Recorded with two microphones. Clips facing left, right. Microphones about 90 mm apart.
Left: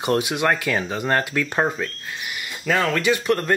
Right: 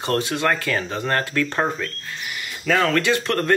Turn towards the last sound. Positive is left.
turn(degrees=10)  # may be behind; listen again after turning